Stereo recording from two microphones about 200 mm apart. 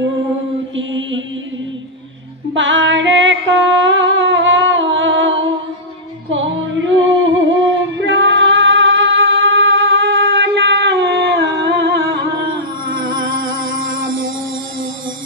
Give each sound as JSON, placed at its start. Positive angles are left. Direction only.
{"t": 0.7, "sound": "mantra", "side_deg": -70}
{"t": 2.5, "sound": "music", "side_deg": -65}
{"t": 6.3, "sound": "music", "side_deg": -70}